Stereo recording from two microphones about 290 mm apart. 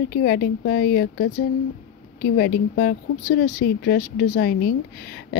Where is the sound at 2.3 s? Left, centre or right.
Left.